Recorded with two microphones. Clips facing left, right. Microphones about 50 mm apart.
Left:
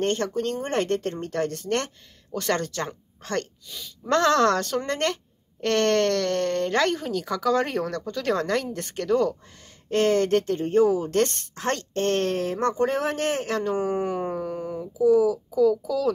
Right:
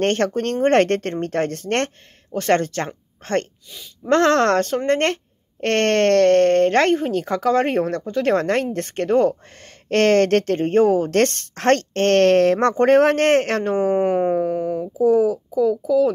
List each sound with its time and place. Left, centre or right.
0.0 s a woman's voice: right
1.1 s speech: right
2.3 s speech: right
9.8 s a woman's voice: right
15.5 s speech: right